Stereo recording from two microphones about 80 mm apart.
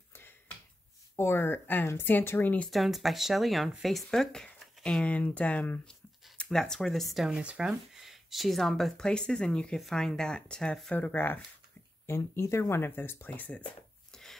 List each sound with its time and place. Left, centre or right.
1.1 s speech: left
2.7 s speech: centre
11.0 s speech: left
12.1 s speech: left; by 13.7 s centre
14.1 s a sound: centre